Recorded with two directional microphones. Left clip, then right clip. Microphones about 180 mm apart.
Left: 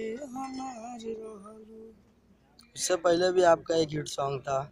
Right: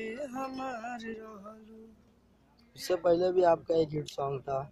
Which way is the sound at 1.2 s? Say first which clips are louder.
Left 3 dB; 30° right (ahead or behind).